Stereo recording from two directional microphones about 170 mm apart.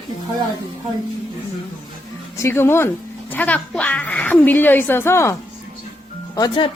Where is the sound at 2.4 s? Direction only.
15° left (ahead or behind).